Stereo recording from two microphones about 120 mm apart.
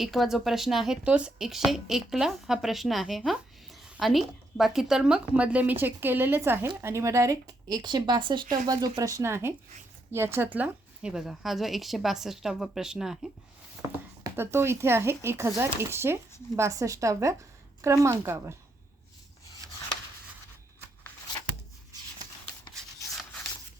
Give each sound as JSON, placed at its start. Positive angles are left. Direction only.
{"t": 0.0, "sound": "a woman's voice", "side_deg": 0}
{"t": 14.3, "sound": "a woman's voice", "side_deg": -20}
{"t": 19.6, "sound": "chopping", "side_deg": -30}